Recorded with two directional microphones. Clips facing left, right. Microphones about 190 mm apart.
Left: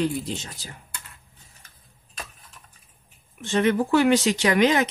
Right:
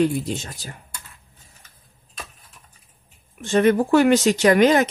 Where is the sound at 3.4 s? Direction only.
45° right (ahead or behind).